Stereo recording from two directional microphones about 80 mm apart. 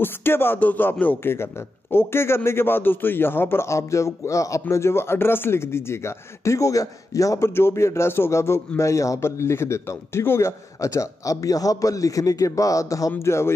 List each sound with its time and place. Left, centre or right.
0.0 s a man's voice: left
13.2 s a man's voice: left